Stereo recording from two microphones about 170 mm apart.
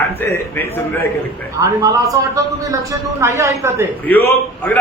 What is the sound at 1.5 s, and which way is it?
A man's voice, 20° right (ahead or behind).